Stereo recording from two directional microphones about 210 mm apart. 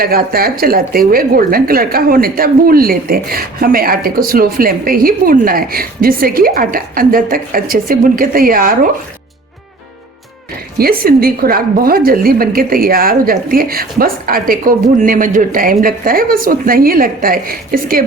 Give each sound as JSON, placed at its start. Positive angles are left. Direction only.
{"t": 0.0, "sound": "a woman's voice", "side_deg": -45}
{"t": 10.8, "sound": "a woman's voice", "side_deg": -45}